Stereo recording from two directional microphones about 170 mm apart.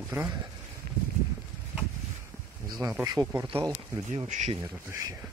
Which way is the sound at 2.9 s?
20° right (ahead or behind).